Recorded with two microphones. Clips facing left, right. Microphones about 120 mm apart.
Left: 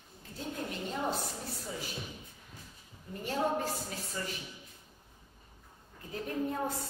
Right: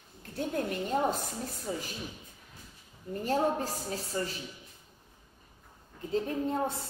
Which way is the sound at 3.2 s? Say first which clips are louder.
Right 3 dB; 40° right (ahead or behind).